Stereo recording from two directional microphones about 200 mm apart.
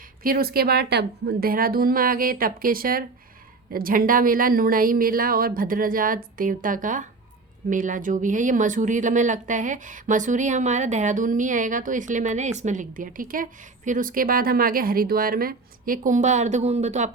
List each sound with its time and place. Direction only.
0.2 s speech: 45° right (ahead or behind)